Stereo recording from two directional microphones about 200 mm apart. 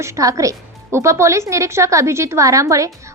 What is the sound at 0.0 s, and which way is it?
A woman's voice, 15° right (ahead or behind).